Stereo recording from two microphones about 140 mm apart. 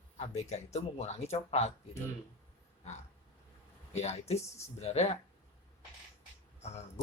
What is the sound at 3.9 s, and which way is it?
Speech, 50° left (ahead or behind).